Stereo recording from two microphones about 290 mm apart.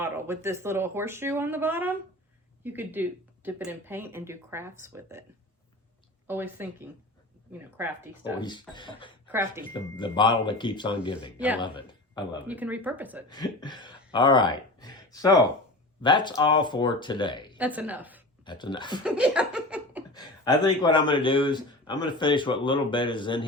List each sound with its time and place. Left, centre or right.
0.0 s speech: centre
6.2 s speech: centre
8.4 s speech: centre
9.2 s speech: centre
9.7 s speech: centre
12.5 s speech: centre
13.2 s speech: centre
17.6 s speech: centre
18.4 s speech: centre
19.0 s laughter: centre
20.1 s speech: centre